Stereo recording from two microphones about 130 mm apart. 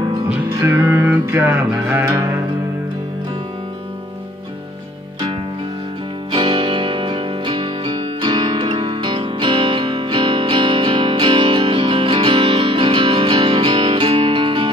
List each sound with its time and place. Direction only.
0.6 s music: 20° right (ahead or behind)
6.3 s music: 40° right (ahead or behind)